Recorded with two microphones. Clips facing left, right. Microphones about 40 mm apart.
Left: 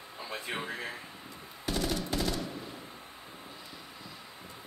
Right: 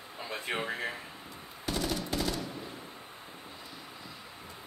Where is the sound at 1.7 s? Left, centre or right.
Centre.